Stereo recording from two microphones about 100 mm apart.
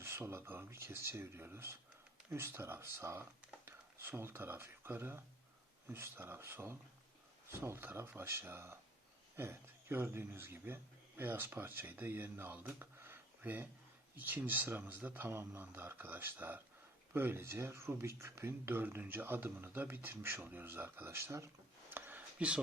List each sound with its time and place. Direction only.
0.0 s speech: 25° right (ahead or behind)